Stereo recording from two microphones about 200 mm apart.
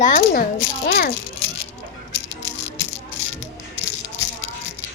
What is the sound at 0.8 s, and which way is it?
Speech, 55° left (ahead or behind).